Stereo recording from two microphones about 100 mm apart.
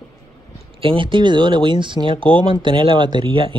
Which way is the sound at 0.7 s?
60° right (ahead or behind).